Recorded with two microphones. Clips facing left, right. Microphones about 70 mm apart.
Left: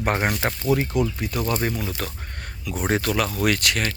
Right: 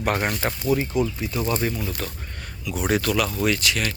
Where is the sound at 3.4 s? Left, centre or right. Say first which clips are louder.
Left 1 dB; left.